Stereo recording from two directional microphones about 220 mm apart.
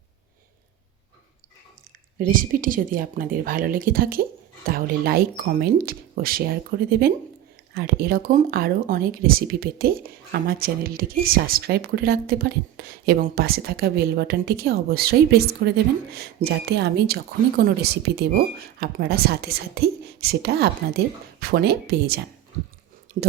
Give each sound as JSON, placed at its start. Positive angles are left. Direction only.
{"t": 2.1, "sound": "speech", "side_deg": -40}